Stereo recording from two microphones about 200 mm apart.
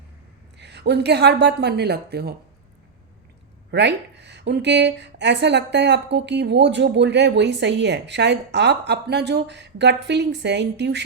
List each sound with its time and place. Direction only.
0.5 s a woman's voice: 60° right (ahead or behind)
3.7 s a woman's voice: 60° right (ahead or behind)